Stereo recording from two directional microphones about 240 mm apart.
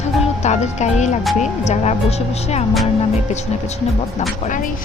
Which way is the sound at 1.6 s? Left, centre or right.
Left.